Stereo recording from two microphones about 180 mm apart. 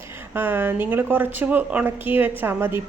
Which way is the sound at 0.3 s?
10° right (ahead or behind).